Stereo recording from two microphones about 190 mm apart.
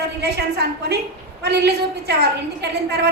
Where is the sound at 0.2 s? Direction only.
60° right (ahead or behind).